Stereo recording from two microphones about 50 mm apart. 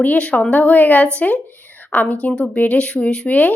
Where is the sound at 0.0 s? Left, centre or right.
Left.